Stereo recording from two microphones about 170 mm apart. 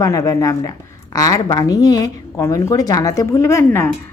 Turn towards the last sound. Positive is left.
turn(degrees=15)  # may be behind; listen again after turning